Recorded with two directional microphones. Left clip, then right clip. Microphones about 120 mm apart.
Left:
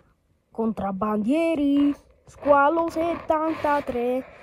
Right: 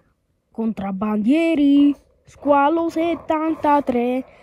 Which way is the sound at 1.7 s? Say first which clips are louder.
Right 6 dB; 45° right (ahead or behind).